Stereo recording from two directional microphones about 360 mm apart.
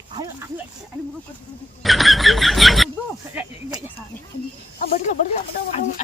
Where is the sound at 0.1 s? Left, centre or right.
Centre.